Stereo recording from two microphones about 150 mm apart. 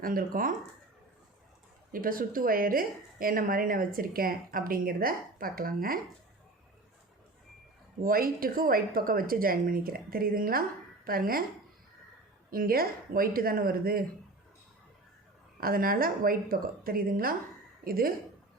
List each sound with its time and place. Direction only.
0.0 s a woman's voice: 70° right (ahead or behind)
1.9 s a woman's voice: 70° right (ahead or behind)
8.0 s a woman's voice: 75° right (ahead or behind)
12.5 s a woman's voice: 80° right
15.6 s a woman's voice: 75° right (ahead or behind)